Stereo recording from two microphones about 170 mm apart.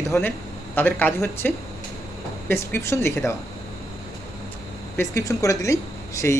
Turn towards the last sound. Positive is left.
turn(degrees=20)  # may be behind; listen again after turning